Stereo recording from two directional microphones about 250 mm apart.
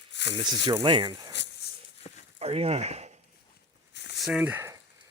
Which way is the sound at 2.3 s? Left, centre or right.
Right.